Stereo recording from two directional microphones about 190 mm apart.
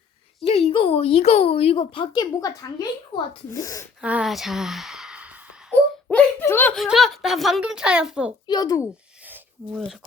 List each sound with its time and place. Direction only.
0.4 s a woman's voice: 30° left (ahead or behind); by 3.8 s 15° left (ahead or behind)
4.0 s speech: 5° right (ahead or behind)
6.1 s giggle: 10° left (ahead or behind)
6.7 s speech: centre (ahead or behind)
8.4 s a child's voice: 20° left (ahead or behind)
9.2 s a sound: 5° right (ahead or behind)